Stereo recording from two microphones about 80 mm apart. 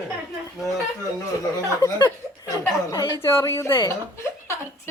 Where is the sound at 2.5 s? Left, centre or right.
Left.